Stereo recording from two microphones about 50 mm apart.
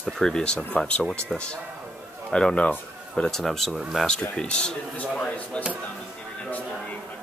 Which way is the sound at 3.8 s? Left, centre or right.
Centre.